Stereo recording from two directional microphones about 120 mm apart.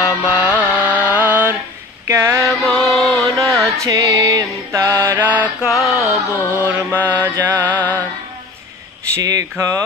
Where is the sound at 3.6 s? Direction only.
25° right (ahead or behind).